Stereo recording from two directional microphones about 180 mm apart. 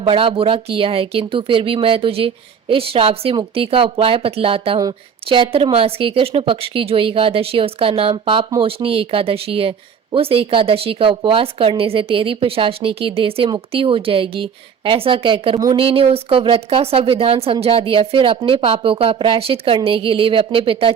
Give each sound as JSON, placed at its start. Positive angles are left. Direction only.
{"t": 0.0, "sound": "speech", "side_deg": -30}